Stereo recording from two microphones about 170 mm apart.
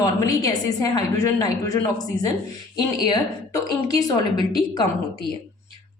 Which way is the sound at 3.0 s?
20° left (ahead or behind).